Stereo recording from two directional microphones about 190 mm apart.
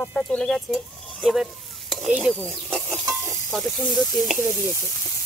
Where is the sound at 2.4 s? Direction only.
Centre (ahead or behind).